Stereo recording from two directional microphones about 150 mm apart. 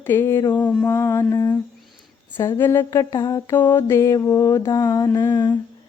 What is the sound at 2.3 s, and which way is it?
Mantra, 15° left (ahead or behind).